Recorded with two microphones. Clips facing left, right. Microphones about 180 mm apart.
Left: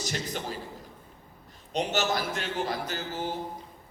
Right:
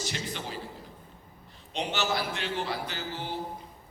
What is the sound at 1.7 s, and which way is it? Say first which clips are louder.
A man's voice: left 3 dB; 45° left (ahead or behind).